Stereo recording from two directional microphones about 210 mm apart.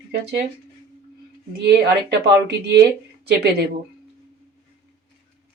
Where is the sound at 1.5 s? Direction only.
50° right (ahead or behind).